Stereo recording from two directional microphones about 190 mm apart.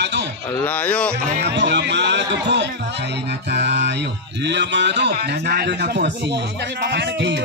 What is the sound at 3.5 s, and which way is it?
A man's voice, 65° right (ahead or behind).